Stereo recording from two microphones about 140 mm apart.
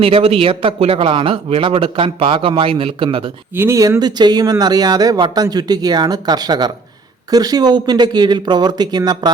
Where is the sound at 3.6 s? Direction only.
20° right (ahead or behind).